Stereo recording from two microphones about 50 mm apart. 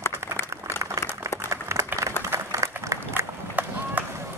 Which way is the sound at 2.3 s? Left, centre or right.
Right.